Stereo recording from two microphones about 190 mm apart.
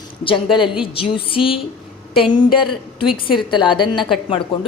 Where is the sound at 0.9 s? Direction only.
30° left (ahead or behind).